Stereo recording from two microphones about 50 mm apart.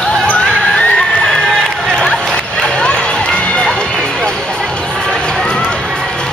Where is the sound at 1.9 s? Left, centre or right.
Centre.